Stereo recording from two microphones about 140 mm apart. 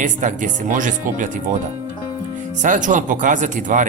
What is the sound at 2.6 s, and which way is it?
Speech, 65° right (ahead or behind).